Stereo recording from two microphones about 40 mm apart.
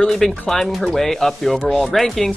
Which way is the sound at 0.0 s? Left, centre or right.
Centre.